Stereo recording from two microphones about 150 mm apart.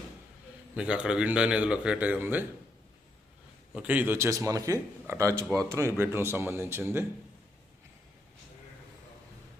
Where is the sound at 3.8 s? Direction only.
10° right (ahead or behind).